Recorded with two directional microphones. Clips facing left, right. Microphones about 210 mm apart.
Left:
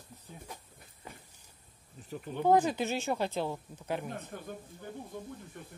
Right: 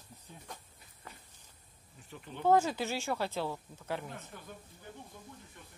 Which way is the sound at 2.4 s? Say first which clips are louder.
Left 1 dB; 15° left (ahead or behind).